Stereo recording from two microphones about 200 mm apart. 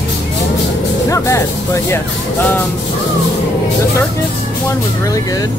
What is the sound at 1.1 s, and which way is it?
Speech, 15° left (ahead or behind).